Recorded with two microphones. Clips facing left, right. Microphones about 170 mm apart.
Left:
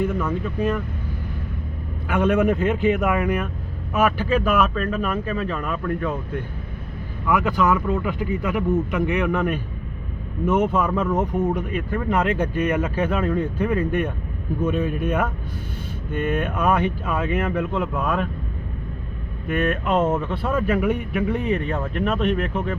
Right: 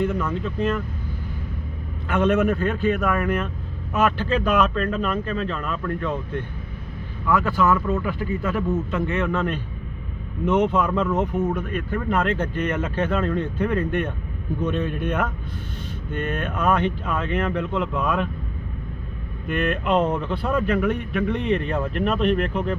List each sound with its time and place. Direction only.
0.0 s speech: 10° left (ahead or behind)
2.0 s speech: 10° left (ahead or behind)
19.5 s a man's voice: 5° left (ahead or behind)